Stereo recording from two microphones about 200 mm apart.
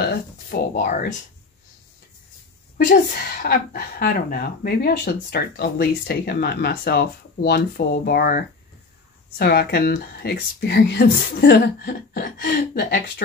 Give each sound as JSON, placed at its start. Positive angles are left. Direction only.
{"t": 0.5, "sound": "a woman's voice", "side_deg": 45}
{"t": 2.9, "sound": "a woman's voice", "side_deg": 45}